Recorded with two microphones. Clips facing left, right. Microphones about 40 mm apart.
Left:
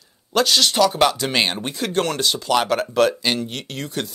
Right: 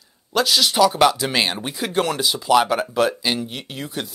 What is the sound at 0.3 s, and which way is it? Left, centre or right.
Speech, centre.